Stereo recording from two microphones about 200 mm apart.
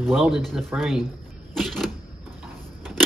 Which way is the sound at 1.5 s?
Centre (ahead or behind).